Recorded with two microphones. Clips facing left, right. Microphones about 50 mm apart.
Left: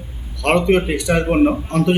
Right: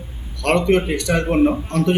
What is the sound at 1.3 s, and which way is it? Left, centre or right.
Speech, left.